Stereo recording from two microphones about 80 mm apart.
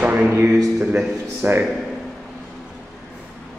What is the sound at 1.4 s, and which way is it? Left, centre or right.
Speech, right.